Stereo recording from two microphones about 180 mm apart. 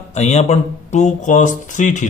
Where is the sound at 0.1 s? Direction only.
40° left (ahead or behind).